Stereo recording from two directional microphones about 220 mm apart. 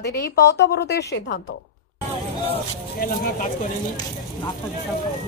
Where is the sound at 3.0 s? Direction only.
40° left (ahead or behind).